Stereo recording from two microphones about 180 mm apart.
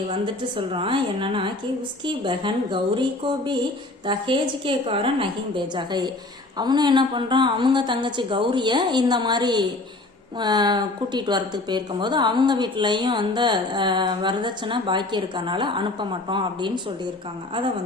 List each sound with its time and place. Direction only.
0.1 s a woman's voice: 30° right (ahead or behind)